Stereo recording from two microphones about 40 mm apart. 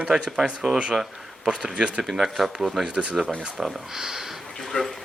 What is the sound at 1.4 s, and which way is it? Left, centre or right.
Speech, centre.